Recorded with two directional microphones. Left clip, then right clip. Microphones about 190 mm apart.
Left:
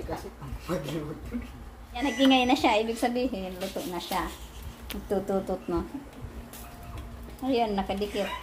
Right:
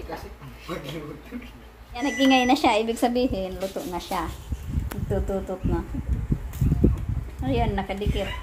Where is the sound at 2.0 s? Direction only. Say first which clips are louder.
Right 3 dB; 15° right (ahead or behind).